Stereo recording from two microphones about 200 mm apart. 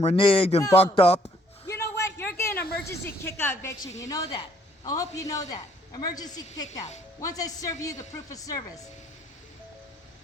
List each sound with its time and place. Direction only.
0.0 s a woman's voice: 30° left (ahead or behind)
0.6 s a man's voice: 15° left (ahead or behind)
0.9 s a woman's voice: 30° left (ahead or behind)
1.6 s a sound: 15° left (ahead or behind)
3.0 s a man's voice: 10° left (ahead or behind)